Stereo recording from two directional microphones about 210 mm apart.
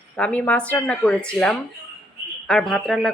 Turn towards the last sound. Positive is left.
turn(degrees=0)  # may be behind; listen again after turning